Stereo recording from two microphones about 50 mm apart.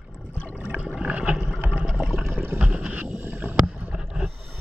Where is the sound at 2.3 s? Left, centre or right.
Right.